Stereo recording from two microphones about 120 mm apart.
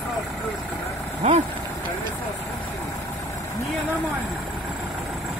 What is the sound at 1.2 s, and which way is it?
Speech, 55° right (ahead or behind).